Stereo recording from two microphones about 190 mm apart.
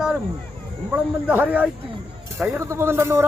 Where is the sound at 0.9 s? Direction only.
10° right (ahead or behind).